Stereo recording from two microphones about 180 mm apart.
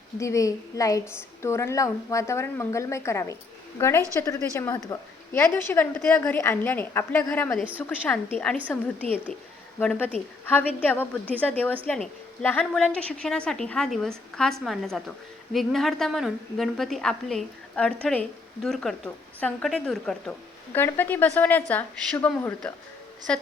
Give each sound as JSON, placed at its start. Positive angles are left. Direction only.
{"t": 0.2, "sound": "a woman's voice", "side_deg": 15}
{"t": 7.5, "sound": "a woman's voice", "side_deg": -5}
{"t": 7.9, "sound": "a woman's voice", "side_deg": 5}